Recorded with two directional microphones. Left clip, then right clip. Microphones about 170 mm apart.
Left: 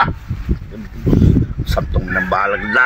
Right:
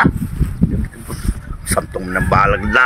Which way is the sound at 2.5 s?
40° right (ahead or behind).